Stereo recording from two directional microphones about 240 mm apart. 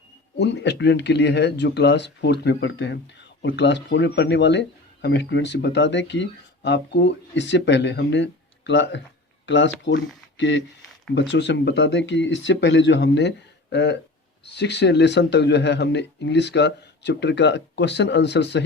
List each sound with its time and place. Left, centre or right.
0.3 s speech: left